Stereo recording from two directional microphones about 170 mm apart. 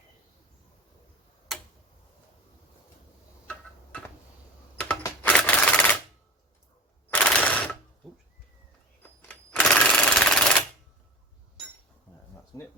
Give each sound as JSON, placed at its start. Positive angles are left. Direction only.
{"t": 1.5, "sound": "tick-tock", "side_deg": 0}
{"t": 3.5, "sound": "tick-tock", "side_deg": 5}
{"t": 5.0, "sound": "typewriter", "side_deg": 10}
{"t": 7.1, "sound": "a sound", "side_deg": 10}
{"t": 9.0, "sound": "sewing machine", "side_deg": 10}